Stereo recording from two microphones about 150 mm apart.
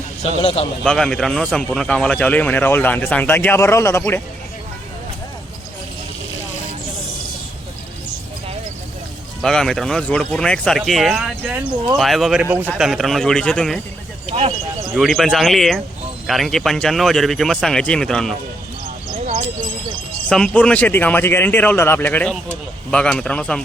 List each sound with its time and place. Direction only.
0.2 s a man's voice: 40° left (ahead or behind)
0.9 s speech: 5° left (ahead or behind)
9.4 s speech: 5° left (ahead or behind)
14.3 s speech: 40° right (ahead or behind)
14.9 s speech: centre (ahead or behind)
20.3 s speech: 5° left (ahead or behind)